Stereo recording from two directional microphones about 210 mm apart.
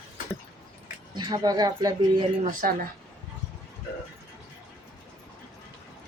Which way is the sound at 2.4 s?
40° right (ahead or behind).